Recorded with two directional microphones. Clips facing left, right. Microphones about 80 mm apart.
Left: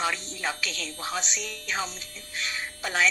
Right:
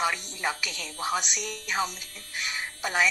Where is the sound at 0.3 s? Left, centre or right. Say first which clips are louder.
Right 1 dB; right.